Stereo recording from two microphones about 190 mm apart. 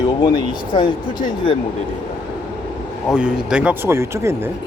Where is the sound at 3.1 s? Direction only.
5° right (ahead or behind).